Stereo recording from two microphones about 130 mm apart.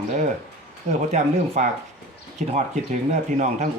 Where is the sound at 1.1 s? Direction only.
60° right (ahead or behind).